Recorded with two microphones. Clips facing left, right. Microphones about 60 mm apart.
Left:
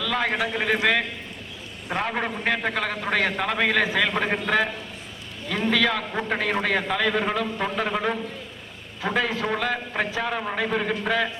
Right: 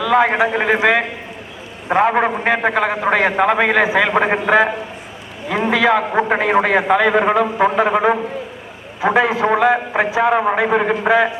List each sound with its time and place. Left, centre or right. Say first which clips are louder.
0.0 s a man's voice: right 10 dB; centre
2.0 s a man's voice: right 12 dB; right
9.1 s a man's voice: right 9 dB; centre
9.5 s a man's voice: right 11 dB; right